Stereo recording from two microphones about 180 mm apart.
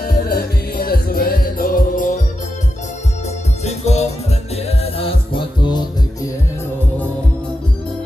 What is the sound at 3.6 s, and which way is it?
Music, 35° left (ahead or behind).